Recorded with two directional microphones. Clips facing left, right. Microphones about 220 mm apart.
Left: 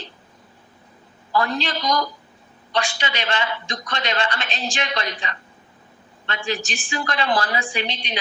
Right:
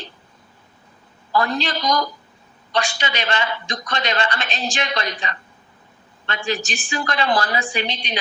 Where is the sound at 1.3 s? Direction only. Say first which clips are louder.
Right 1 dB; 40° right (ahead or behind).